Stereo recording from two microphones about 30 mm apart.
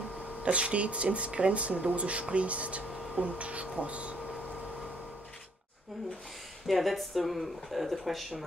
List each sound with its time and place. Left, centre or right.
0.4 s speech: right
6.7 s speech: centre